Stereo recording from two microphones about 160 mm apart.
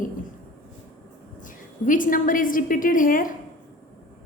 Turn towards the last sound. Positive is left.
turn(degrees=60)  # may be behind; listen again after turning